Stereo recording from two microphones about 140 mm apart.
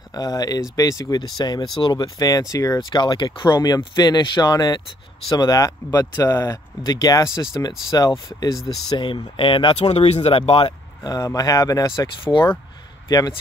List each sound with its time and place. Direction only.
0.1 s speech: 25° left (ahead or behind); by 10.3 s 50° left (ahead or behind)
10.3 s speech: 40° left (ahead or behind)
11.1 s speech: 25° left (ahead or behind)